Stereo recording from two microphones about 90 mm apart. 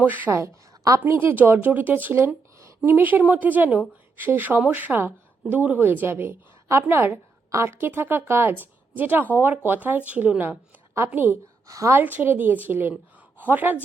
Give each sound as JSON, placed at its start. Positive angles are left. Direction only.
{"t": 0.0, "sound": "a woman's voice", "side_deg": -20}
{"t": 11.7, "sound": "a woman's voice", "side_deg": -35}